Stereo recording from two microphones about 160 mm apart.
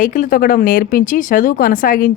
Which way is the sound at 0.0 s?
55° left (ahead or behind).